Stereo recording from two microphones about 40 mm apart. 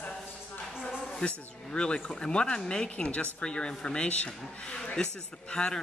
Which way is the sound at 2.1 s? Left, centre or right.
Left.